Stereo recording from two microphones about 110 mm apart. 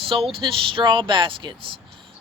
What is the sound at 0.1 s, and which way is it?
Speech, 50° right (ahead or behind).